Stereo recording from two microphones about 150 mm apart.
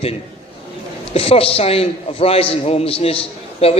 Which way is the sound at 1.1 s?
40° left (ahead or behind).